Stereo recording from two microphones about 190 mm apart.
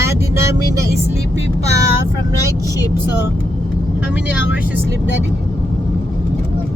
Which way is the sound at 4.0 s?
5° right (ahead or behind).